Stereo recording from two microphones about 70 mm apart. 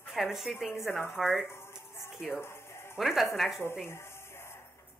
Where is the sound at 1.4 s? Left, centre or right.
Left.